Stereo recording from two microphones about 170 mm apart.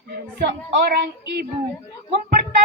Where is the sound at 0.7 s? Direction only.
70° right (ahead or behind).